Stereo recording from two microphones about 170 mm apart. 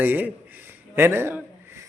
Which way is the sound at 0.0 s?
10° right (ahead or behind).